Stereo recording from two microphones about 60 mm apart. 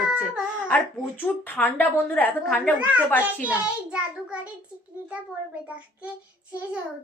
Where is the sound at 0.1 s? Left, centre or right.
Centre.